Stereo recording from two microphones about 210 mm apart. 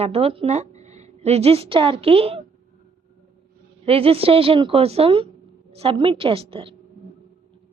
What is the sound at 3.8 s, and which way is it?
A woman's voice, 30° right (ahead or behind).